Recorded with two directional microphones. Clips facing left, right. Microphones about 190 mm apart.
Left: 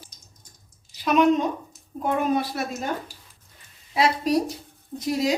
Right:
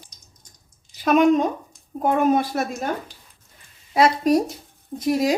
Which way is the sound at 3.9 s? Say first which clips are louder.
Right 4 dB; 45° right (ahead or behind).